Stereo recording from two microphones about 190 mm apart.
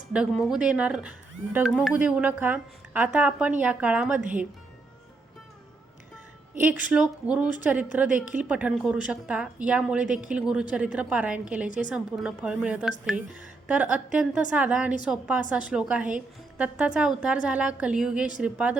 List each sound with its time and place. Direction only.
0.1 s a woman's voice: 5° right (ahead or behind)
6.6 s a woman's voice: 5° right (ahead or behind)